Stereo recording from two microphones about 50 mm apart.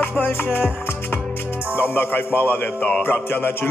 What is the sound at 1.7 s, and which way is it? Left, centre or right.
Music, left.